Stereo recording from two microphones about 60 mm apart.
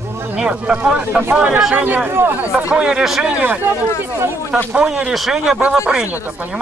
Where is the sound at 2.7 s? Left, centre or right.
Centre.